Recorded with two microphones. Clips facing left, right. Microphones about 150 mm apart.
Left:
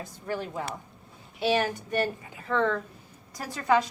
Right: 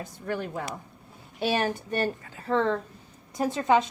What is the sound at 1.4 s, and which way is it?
A woman's voice, 40° right (ahead or behind).